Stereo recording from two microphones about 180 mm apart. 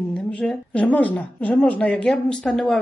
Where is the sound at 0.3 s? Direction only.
5° left (ahead or behind).